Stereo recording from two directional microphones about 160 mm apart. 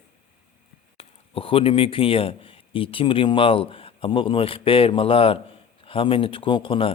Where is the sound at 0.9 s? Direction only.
35° left (ahead or behind).